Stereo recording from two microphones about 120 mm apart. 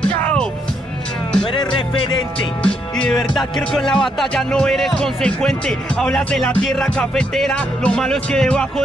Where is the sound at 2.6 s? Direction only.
10° left (ahead or behind).